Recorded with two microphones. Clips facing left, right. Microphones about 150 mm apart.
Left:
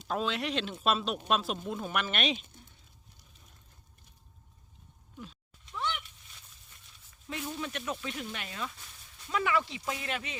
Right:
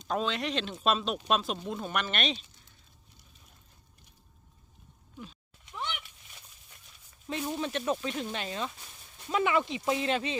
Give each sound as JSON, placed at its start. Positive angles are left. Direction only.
{"t": 0.0, "sound": "speech", "side_deg": 5}
{"t": 5.7, "sound": "a sound", "side_deg": -15}
{"t": 7.3, "sound": "speech", "side_deg": -30}